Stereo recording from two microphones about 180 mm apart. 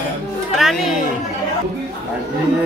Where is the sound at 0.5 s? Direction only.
Centre (ahead or behind).